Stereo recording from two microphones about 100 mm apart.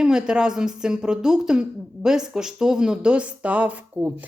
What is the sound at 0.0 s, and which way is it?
Speech, 5° right (ahead or behind).